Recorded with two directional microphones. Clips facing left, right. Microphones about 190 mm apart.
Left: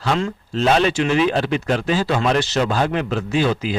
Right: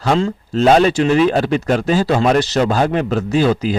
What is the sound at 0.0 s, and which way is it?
Speech, 40° right (ahead or behind).